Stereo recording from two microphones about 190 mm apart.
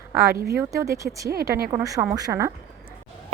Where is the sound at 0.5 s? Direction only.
15° right (ahead or behind).